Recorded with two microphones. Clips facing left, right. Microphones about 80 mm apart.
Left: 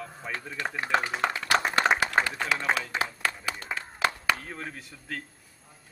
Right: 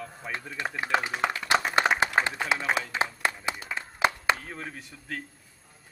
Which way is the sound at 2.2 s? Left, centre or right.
Centre.